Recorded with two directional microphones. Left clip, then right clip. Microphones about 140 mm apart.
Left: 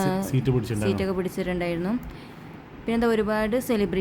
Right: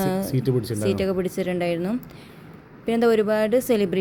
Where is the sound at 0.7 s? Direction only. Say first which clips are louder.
Right 3 dB; 5° right (ahead or behind).